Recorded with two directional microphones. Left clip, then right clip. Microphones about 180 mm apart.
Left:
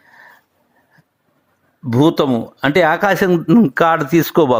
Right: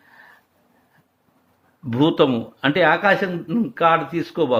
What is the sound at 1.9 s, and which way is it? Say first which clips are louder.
Speech: left 3 dB; 35° left (ahead or behind).